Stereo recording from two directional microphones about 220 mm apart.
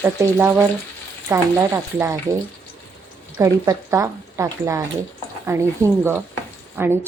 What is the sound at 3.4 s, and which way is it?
A woman's voice, 15° right (ahead or behind).